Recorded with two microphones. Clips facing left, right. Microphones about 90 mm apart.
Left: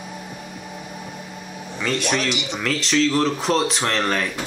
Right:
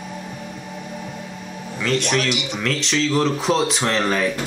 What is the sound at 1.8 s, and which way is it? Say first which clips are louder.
Speech: right 2 dB; 5° left (ahead or behind).